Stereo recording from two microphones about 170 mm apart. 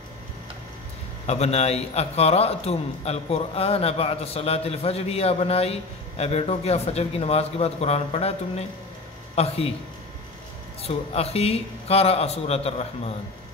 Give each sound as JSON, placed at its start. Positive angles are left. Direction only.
{"t": 1.2, "sound": "a man's voice", "side_deg": 40}
{"t": 10.8, "sound": "a man's voice", "side_deg": 35}